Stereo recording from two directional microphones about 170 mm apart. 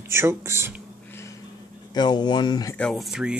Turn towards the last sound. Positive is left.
turn(degrees=-5)  # may be behind; listen again after turning